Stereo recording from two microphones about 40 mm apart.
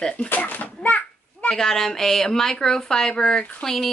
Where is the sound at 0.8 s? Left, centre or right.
Left.